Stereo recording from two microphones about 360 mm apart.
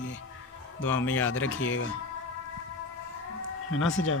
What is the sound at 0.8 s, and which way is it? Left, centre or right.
Speech, centre.